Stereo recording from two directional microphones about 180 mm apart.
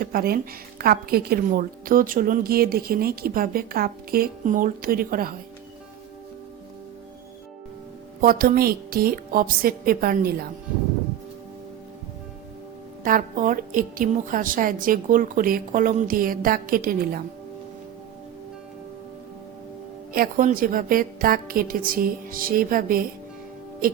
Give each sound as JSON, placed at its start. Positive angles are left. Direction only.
{"t": 0.0, "sound": "a woman's voice", "side_deg": -55}
{"t": 8.2, "sound": "a woman's voice", "side_deg": -55}
{"t": 13.1, "sound": "a woman's voice", "side_deg": -50}
{"t": 20.1, "sound": "a woman's voice", "side_deg": -50}